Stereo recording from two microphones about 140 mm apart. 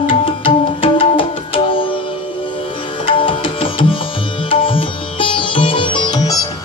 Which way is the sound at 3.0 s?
40° left (ahead or behind).